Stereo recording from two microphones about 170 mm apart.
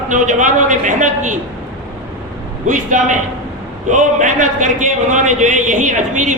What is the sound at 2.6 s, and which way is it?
A man's voice, 45° right (ahead or behind).